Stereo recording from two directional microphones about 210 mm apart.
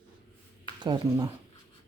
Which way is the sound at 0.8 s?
20° right (ahead or behind).